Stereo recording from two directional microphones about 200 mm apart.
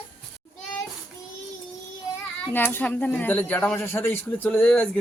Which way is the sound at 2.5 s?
10° left (ahead or behind).